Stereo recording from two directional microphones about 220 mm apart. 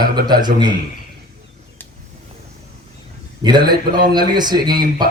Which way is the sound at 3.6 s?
40° right (ahead or behind).